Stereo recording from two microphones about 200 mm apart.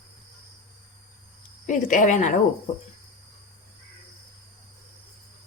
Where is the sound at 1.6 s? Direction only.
40° left (ahead or behind).